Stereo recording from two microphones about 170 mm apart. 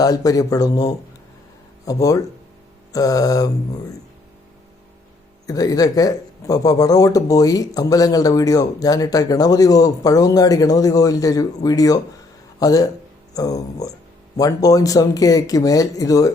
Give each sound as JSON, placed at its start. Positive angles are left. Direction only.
{"t": 0.0, "sound": "speech", "side_deg": 20}
{"t": 5.5, "sound": "speech", "side_deg": 20}